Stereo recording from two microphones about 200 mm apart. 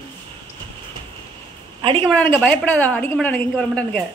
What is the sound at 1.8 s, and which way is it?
Speech, 25° right (ahead or behind).